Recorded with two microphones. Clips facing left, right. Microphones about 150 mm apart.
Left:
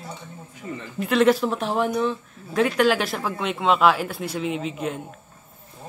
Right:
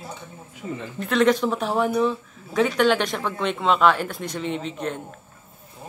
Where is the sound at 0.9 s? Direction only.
5° left (ahead or behind).